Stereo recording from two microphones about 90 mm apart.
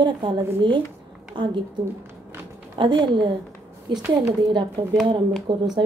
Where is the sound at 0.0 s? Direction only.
60° right (ahead or behind).